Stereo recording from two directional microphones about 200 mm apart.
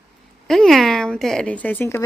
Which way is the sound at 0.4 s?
Centre (ahead or behind).